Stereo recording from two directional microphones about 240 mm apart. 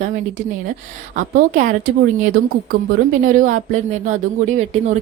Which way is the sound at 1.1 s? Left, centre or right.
Right.